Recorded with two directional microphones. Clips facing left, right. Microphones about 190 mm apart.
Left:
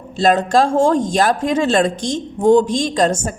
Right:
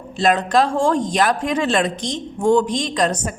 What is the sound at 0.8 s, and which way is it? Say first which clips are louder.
A woman's voice: left 3 dB; 25° left (ahead or behind).